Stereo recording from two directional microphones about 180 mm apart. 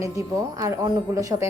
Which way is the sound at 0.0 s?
20° right (ahead or behind).